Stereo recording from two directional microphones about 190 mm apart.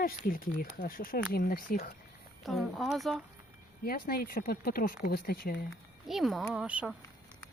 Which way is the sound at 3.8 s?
50° left (ahead or behind).